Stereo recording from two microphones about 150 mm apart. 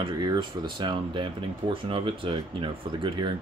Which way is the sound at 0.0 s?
30° right (ahead or behind).